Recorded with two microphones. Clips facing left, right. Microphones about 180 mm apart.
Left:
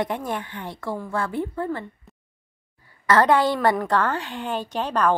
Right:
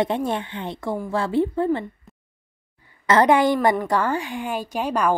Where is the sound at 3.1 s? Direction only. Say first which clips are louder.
Right 2 dB; 15° right (ahead or behind).